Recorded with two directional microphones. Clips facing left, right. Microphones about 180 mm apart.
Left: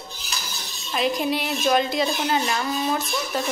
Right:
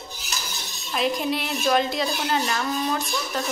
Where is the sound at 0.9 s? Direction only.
Centre (ahead or behind).